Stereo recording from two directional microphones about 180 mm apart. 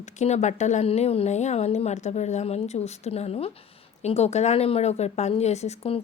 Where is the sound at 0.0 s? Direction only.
40° left (ahead or behind).